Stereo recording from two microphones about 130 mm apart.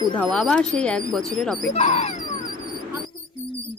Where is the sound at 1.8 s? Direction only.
55° left (ahead or behind).